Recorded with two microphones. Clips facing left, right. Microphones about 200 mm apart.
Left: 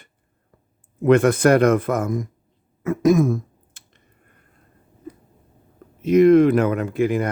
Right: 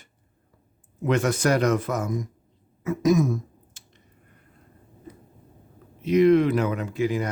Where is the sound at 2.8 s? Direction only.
55° left (ahead or behind).